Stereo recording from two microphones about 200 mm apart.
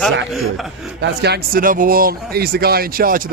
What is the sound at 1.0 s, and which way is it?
Speech, 55° right (ahead or behind).